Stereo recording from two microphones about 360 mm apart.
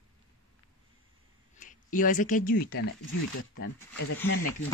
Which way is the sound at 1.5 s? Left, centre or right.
Left.